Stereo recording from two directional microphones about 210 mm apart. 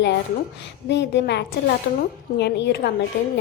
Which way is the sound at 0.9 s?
55° left (ahead or behind).